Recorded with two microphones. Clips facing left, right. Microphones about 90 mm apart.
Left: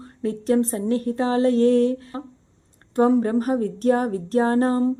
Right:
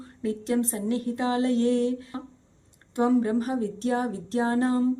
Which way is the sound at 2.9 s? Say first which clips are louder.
Left 4 dB; 40° left (ahead or behind).